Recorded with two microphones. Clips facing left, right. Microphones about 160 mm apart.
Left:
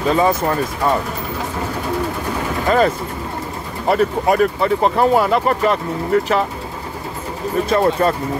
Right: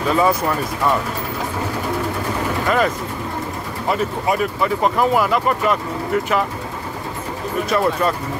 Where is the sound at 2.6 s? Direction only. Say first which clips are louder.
Left 4 dB; 35° left (ahead or behind).